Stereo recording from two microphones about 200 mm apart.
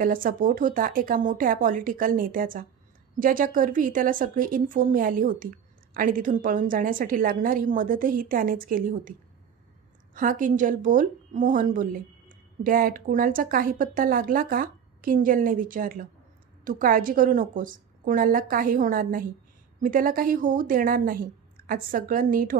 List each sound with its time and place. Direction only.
0.0 s a woman's voice: 45° right (ahead or behind)
10.1 s a woman's voice: 40° right (ahead or behind)